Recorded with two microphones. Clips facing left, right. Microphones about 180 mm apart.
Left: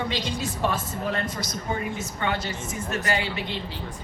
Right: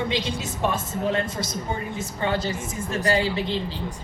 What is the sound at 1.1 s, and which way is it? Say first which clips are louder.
Speech: right 3 dB; 25° right (ahead or behind).